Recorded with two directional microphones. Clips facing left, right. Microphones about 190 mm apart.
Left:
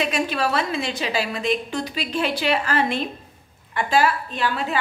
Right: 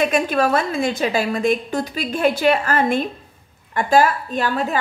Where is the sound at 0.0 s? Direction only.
50° right (ahead or behind).